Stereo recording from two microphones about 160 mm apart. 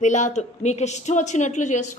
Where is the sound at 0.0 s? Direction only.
50° left (ahead or behind).